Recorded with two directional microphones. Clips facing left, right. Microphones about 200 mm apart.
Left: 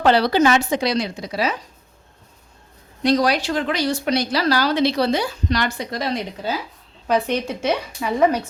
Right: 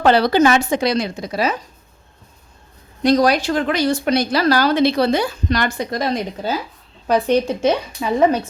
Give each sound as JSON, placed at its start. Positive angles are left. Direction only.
{"t": 0.0, "sound": "speech", "side_deg": -50}
{"t": 3.0, "sound": "speech", "side_deg": -45}